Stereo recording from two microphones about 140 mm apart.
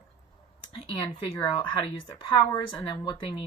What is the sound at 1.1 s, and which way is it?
Speech, 40° left (ahead or behind).